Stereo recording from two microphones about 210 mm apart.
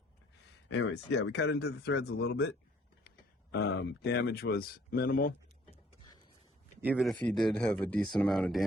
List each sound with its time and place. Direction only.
0.7 s speech: 60° left (ahead or behind)
3.5 s speech: 50° left (ahead or behind)
6.8 s speech: 5° right (ahead or behind)